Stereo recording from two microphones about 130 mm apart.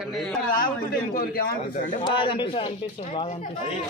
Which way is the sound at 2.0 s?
40° left (ahead or behind).